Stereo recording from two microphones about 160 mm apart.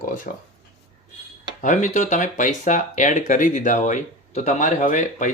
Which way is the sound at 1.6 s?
50° left (ahead or behind).